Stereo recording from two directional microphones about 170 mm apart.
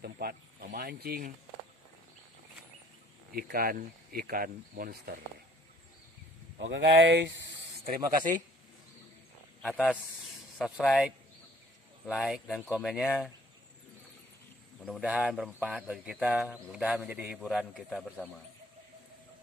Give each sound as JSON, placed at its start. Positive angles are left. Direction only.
{"t": 0.0, "sound": "speech", "side_deg": -65}
{"t": 3.3, "sound": "speech", "side_deg": -60}
{"t": 6.6, "sound": "speech", "side_deg": -90}
{"t": 7.9, "sound": "speech", "side_deg": -55}
{"t": 9.6, "sound": "speech", "side_deg": 5}
{"t": 14.8, "sound": "speech", "side_deg": -5}